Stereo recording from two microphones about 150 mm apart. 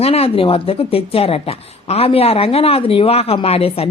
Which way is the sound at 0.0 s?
40° left (ahead or behind).